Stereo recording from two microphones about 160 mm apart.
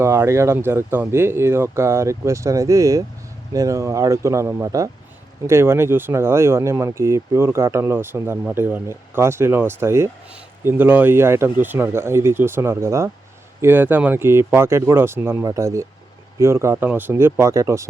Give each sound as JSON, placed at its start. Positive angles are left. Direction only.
{"t": 0.0, "sound": "speech", "side_deg": -15}